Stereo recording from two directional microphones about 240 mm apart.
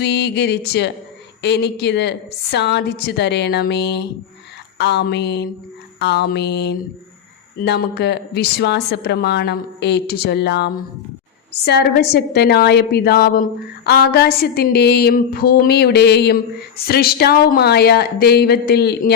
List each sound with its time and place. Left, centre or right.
0.0 s a woman's voice: left